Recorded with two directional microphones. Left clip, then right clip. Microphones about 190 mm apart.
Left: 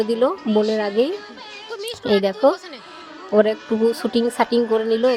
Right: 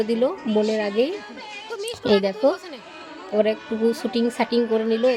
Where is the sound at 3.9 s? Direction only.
20° left (ahead or behind).